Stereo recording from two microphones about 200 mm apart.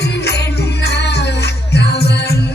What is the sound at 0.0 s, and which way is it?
Music, 55° left (ahead or behind).